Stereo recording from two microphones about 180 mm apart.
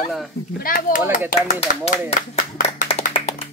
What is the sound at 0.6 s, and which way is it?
Speech, 50° left (ahead or behind).